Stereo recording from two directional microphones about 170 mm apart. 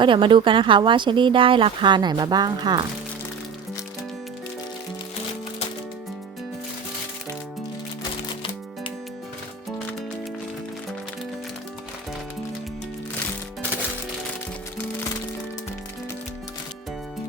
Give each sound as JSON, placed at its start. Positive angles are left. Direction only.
{"t": 0.0, "sound": "speech", "side_deg": -30}